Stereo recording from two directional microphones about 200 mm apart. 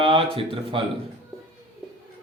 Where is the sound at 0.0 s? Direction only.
25° right (ahead or behind).